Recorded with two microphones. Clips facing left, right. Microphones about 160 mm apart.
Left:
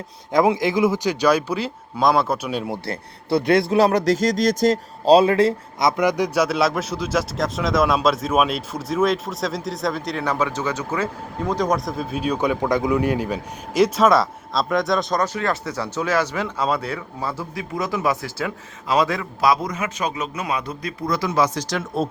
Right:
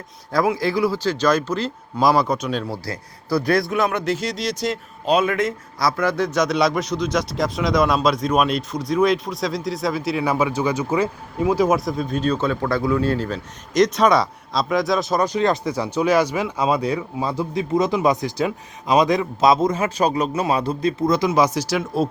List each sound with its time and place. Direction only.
0.3 s speech: 20° left (ahead or behind)
2.0 s a man's voice: centre (ahead or behind)
2.7 s speech: 25° left (ahead or behind)
6.0 s a man's voice: 15° left (ahead or behind); by 15.2 s centre (ahead or behind)
15.2 s speech: 15° right (ahead or behind)